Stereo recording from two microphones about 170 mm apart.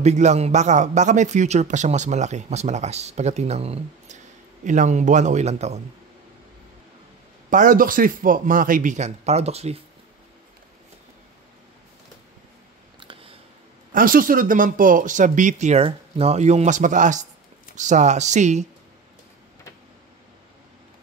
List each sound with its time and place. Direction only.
0.0 s a man's voice: 40° right (ahead or behind)
7.4 s speech: 50° right (ahead or behind)
13.0 s a sound: 30° right (ahead or behind)
13.9 s speech: 55° right (ahead or behind)